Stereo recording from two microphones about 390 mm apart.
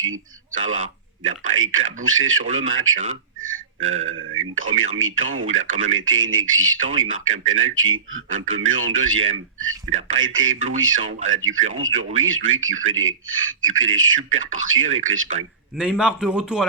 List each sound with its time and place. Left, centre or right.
0.5 s a man's voice: right
15.8 s a man's voice: centre